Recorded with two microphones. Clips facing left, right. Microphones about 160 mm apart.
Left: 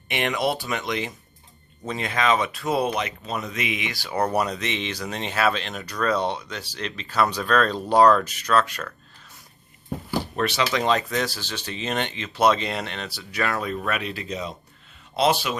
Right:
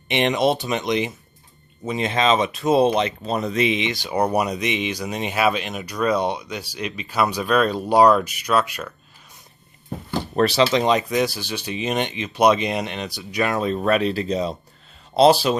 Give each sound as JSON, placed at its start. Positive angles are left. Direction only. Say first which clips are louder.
{"t": 0.1, "sound": "speech", "louder": "right 5 dB", "side_deg": -20}
{"t": 10.3, "sound": "speech", "louder": "right 8 dB", "side_deg": -35}